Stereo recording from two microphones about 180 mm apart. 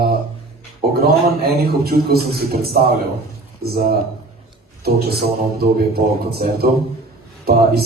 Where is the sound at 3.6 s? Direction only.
60° right (ahead or behind).